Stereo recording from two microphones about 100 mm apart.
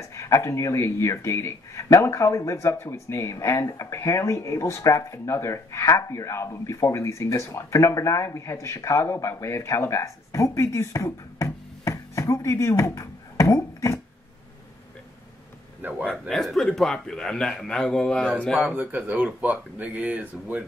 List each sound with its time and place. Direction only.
0.0 s speech: 30° left (ahead or behind)
15.8 s a sound: 15° right (ahead or behind)
16.1 s a man's voice: 5° left (ahead or behind)
18.6 s speech: 10° right (ahead or behind)